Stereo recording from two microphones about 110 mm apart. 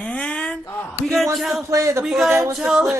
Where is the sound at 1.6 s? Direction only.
25° right (ahead or behind).